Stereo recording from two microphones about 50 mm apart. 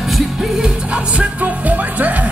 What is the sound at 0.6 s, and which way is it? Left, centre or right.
Music, right.